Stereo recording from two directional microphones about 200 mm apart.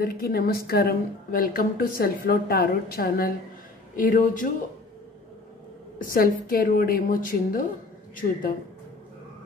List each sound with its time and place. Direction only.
0.0 s a woman's voice: 50° left (ahead or behind)
6.0 s a woman's voice: 45° left (ahead or behind)